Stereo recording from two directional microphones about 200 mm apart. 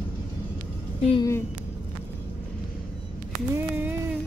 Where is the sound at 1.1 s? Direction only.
15° left (ahead or behind).